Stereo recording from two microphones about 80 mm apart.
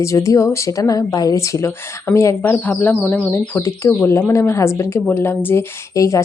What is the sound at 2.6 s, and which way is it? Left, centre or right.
Speech, left.